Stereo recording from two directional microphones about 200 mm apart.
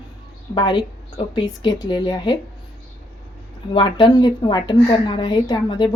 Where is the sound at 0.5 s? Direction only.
25° left (ahead or behind).